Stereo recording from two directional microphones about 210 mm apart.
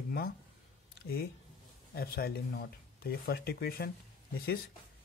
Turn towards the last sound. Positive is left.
turn(degrees=45)  # may be behind; listen again after turning